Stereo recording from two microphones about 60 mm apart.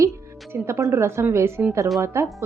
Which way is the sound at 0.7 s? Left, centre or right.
Right.